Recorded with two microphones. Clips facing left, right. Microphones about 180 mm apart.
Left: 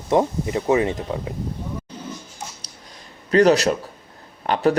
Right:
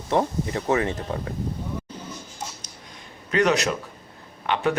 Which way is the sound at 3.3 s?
35° left (ahead or behind).